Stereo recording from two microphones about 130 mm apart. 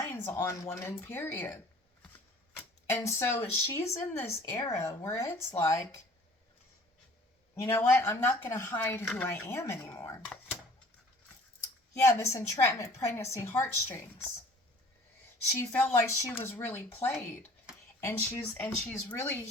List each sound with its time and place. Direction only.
0.0 s speech: 20° left (ahead or behind)
7.5 s speech: 20° left (ahead or behind)
11.9 s speech: 20° left (ahead or behind)
15.5 s speech: 20° left (ahead or behind)